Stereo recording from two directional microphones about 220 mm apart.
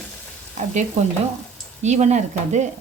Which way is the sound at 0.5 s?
30° right (ahead or behind).